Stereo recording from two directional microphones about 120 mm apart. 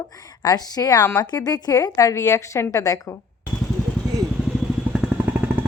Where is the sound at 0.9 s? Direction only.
20° left (ahead or behind).